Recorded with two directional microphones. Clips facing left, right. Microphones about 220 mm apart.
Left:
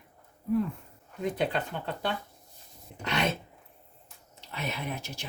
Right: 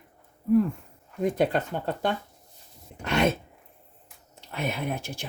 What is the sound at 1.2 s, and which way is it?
Speech, 45° right (ahead or behind).